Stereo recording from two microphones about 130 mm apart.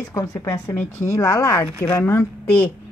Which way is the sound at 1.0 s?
25° left (ahead or behind).